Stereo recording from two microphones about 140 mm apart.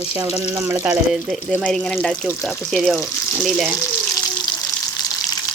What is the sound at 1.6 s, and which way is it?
Speech, 5° left (ahead or behind).